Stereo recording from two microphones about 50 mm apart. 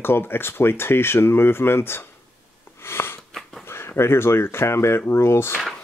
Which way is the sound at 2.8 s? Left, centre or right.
Left.